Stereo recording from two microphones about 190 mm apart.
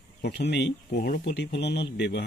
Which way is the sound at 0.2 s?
65° left (ahead or behind).